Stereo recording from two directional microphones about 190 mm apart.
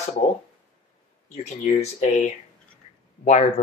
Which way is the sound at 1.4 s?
35° left (ahead or behind).